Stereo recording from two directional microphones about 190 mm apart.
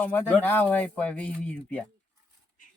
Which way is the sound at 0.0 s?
10° left (ahead or behind).